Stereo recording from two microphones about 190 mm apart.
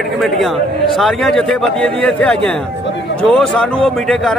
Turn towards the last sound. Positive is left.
turn(degrees=0)  # may be behind; listen again after turning